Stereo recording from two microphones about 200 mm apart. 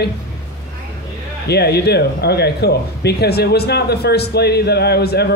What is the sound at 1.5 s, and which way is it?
Speech, 55° left (ahead or behind).